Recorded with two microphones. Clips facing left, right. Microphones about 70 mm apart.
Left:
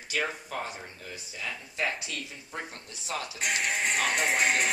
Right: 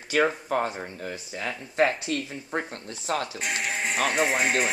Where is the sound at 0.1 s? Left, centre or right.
Right.